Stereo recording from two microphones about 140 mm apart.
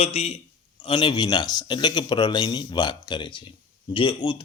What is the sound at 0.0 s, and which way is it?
Speech, 45° left (ahead or behind).